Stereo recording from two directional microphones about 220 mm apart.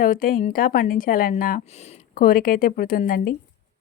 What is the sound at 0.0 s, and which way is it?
Speech, 40° left (ahead or behind).